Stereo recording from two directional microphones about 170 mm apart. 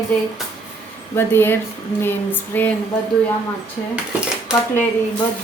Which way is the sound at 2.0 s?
10° left (ahead or behind).